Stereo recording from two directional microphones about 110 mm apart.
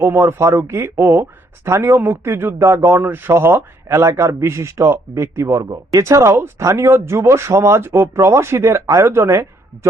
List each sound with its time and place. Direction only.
0.0 s speech: 20° right (ahead or behind)